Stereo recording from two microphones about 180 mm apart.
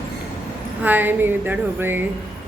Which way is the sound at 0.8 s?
10° right (ahead or behind).